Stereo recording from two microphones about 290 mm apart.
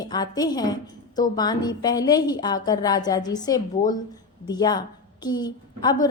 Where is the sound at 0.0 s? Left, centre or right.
Centre.